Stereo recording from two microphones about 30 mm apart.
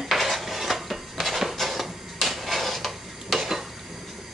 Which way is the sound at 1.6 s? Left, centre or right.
Centre.